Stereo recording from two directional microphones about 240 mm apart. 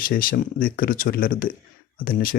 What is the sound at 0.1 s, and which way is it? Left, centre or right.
Speech, left.